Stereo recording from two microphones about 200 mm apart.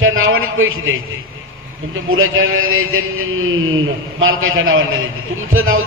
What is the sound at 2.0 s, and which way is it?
A man's voice, 90° right.